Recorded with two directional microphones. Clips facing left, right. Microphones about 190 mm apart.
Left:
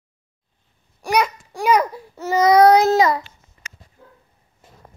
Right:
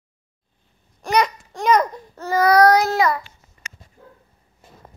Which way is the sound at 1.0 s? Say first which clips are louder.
Even; 10° left (ahead or behind).